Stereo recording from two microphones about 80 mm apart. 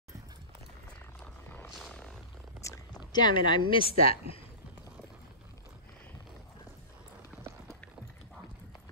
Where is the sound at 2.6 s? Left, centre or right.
Left.